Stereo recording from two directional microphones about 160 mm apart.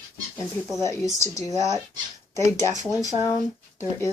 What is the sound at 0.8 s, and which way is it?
Speech, 20° left (ahead or behind).